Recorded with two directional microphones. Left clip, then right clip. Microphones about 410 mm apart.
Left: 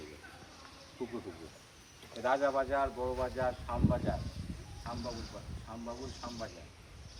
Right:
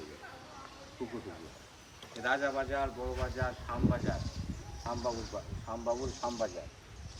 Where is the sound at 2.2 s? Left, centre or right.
Centre.